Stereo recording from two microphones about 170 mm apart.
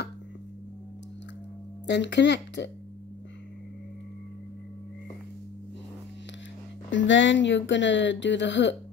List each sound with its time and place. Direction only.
1.9 s speech: 90° left
6.9 s speech: 90° left